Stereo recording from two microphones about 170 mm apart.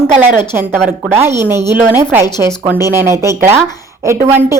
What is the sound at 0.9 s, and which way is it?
A woman's voice, 10° right (ahead or behind).